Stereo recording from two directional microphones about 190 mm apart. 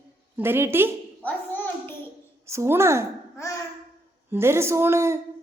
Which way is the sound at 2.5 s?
15° right (ahead or behind).